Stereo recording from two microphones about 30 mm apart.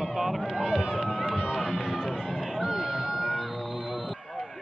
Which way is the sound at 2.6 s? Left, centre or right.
Centre.